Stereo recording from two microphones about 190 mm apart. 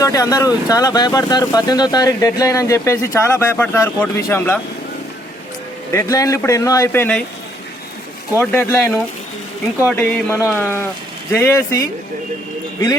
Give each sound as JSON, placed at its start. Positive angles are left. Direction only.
{"t": 0.0, "sound": "speech", "side_deg": 20}
{"t": 5.9, "sound": "speech", "side_deg": 15}
{"t": 8.4, "sound": "speech", "side_deg": 10}